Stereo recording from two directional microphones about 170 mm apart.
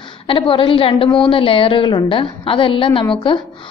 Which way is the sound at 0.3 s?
30° left (ahead or behind).